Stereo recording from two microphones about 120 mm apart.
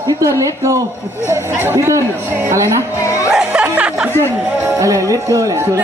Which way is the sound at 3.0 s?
25° left (ahead or behind).